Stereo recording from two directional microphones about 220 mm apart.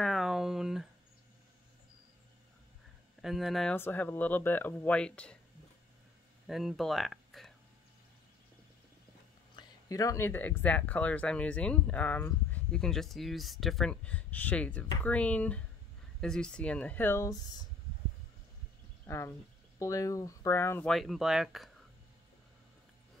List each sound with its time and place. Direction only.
0.0 s a sound: centre (ahead or behind)
3.2 s speech: centre (ahead or behind)
6.4 s speech: centre (ahead or behind)
9.6 s speech: 15° left (ahead or behind)
19.0 s speech: 10° left (ahead or behind)